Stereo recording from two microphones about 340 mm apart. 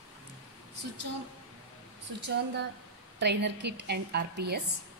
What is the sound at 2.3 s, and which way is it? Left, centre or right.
A woman's voice, right.